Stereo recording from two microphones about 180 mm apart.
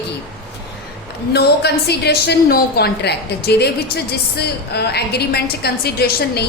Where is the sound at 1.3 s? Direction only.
65° left (ahead or behind).